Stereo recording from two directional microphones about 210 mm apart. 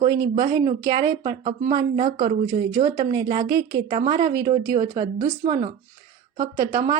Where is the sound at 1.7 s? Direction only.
20° right (ahead or behind).